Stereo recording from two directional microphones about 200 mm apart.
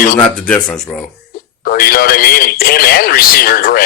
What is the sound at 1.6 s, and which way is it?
Speech, 50° left (ahead or behind).